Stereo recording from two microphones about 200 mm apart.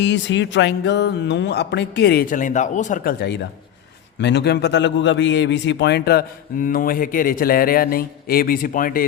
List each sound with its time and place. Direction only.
0.0 s a man's voice: 65° left (ahead or behind); by 9.0 s 45° left (ahead or behind)